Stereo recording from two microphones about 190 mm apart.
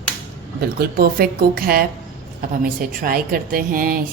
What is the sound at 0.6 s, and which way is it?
A woman's voice, 55° right (ahead or behind).